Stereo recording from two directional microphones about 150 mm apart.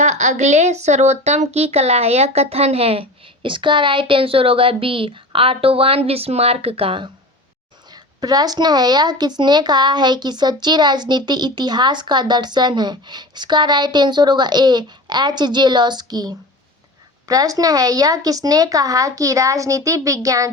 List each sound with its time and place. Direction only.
0.0 s speech: 50° right (ahead or behind); by 7.1 s 35° right (ahead or behind)
8.2 s speech: 25° right (ahead or behind)